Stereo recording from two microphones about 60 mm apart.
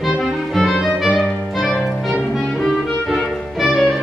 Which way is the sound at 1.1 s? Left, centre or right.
Centre.